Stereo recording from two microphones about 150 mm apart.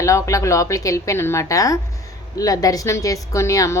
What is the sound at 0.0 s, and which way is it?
A woman's voice, 20° left (ahead or behind).